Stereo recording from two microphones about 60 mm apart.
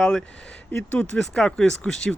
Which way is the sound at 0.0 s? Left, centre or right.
Centre.